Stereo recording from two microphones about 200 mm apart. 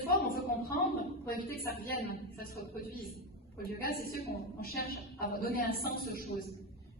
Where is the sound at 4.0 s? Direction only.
50° left (ahead or behind).